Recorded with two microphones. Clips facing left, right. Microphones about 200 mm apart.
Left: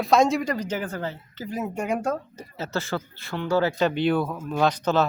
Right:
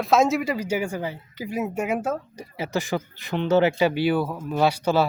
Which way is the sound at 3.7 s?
10° right (ahead or behind).